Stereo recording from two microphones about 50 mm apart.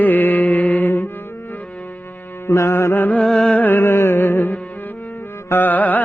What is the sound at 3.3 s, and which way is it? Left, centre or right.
Music, centre.